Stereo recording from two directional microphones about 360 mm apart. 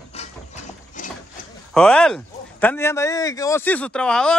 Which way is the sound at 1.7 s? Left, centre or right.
Centre.